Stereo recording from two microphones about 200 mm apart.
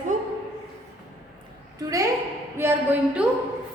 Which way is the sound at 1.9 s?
15° right (ahead or behind).